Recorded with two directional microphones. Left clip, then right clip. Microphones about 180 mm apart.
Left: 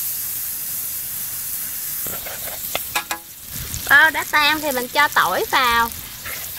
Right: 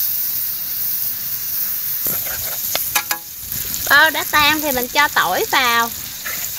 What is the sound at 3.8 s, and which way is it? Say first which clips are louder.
Speech: right 1 dB; 45° right (ahead or behind).